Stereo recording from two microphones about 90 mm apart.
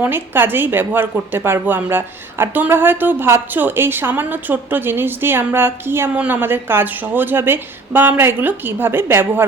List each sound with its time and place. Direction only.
0.0 s a woman's voice: 25° right (ahead or behind)